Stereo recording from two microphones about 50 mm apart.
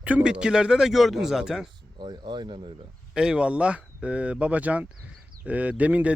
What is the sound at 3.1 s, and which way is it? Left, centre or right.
Speech, centre.